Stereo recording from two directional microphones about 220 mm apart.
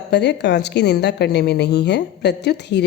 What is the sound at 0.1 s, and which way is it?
A woman's voice, 50° left (ahead or behind).